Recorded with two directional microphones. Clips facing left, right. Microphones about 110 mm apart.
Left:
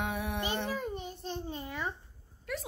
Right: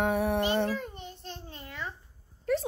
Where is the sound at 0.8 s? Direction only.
10° left (ahead or behind).